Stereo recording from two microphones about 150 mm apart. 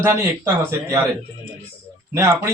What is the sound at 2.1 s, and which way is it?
Speech, 20° right (ahead or behind).